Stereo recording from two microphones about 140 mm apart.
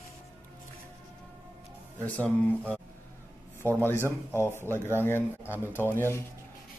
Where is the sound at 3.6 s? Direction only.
20° right (ahead or behind).